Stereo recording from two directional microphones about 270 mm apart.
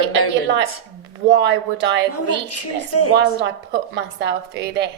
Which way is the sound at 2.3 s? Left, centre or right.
Left.